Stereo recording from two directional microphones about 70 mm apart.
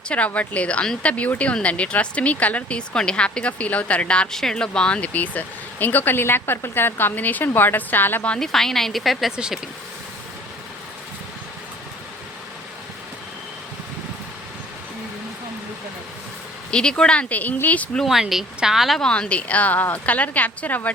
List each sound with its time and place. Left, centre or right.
0.3 s speech: centre
8.4 s speech: centre
9.3 s speech: centre
16.7 s speech: centre
18.0 s speech: centre
18.9 s speech: centre